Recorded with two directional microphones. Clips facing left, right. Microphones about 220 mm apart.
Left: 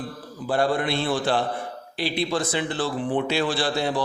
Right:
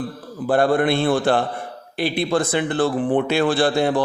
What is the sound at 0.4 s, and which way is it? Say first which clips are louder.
Speech: right 6 dB; 55° right (ahead or behind).